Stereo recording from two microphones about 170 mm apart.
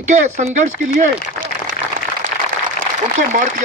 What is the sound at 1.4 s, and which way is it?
Applause, 10° left (ahead or behind).